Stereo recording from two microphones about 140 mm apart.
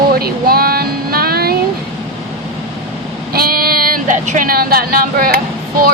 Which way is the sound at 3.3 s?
90° right.